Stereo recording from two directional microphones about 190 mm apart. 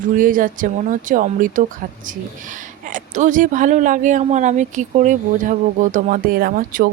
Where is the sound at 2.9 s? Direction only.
40° right (ahead or behind).